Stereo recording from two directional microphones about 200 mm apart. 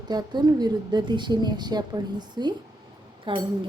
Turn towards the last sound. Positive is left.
turn(degrees=-25)  # may be behind; listen again after turning